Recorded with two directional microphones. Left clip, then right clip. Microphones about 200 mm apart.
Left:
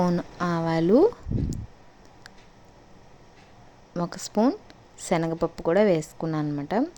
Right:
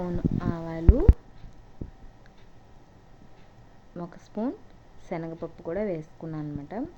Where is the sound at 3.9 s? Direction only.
50° left (ahead or behind).